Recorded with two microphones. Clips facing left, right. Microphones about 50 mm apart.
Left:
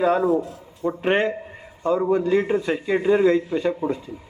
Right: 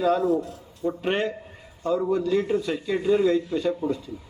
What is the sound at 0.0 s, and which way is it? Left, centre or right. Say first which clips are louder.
A man's voice: left 3 dB; left.